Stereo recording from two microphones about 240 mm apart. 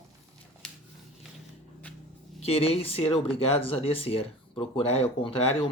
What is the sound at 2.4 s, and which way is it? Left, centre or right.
Speech, left.